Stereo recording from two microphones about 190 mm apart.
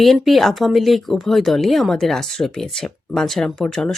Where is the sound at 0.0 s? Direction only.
Centre (ahead or behind).